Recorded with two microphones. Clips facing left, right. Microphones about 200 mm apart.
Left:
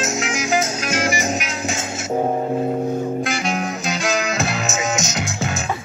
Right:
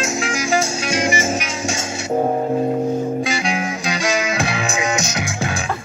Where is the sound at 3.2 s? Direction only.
Centre (ahead or behind).